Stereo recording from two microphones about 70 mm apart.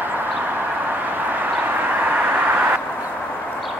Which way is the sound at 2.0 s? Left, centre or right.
Right.